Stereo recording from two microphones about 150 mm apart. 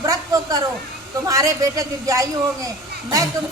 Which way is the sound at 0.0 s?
25° right (ahead or behind).